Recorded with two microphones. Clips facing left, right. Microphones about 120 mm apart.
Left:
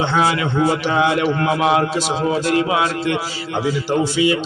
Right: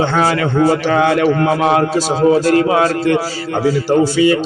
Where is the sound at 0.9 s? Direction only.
50° right (ahead or behind).